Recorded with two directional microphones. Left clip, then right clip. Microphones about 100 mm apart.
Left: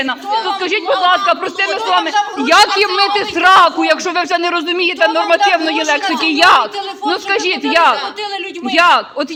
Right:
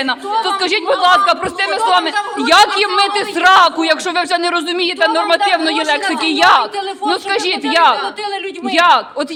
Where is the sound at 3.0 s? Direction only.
5° right (ahead or behind).